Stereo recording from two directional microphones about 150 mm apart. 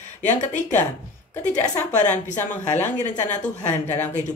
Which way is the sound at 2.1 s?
55° left (ahead or behind).